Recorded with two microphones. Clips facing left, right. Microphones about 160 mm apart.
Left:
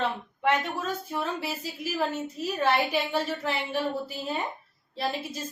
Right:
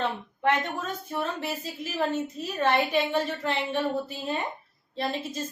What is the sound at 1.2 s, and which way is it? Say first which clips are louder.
Speech: right 1 dB; 10° left (ahead or behind).